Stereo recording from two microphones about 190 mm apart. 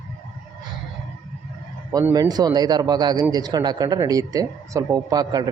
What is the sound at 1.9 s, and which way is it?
Speech, 20° right (ahead or behind).